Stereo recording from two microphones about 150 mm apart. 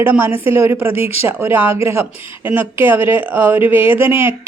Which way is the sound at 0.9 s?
40° left (ahead or behind).